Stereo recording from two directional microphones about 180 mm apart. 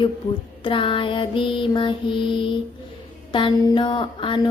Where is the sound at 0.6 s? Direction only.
30° left (ahead or behind).